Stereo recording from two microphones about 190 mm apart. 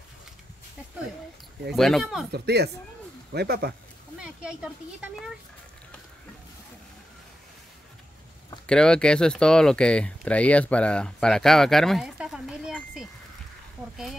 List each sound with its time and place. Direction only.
1.7 s speech: centre (ahead or behind)
2.3 s speech: 60° right (ahead or behind)
4.2 s speech: 5° right (ahead or behind)
8.6 s speech: 5° left (ahead or behind)